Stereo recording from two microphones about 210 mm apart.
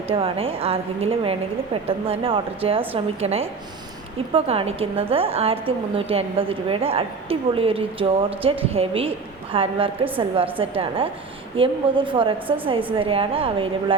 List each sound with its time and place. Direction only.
0.1 s a woman's voice: 25° right (ahead or behind)